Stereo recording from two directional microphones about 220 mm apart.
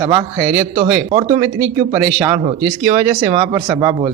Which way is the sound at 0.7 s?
30° right (ahead or behind).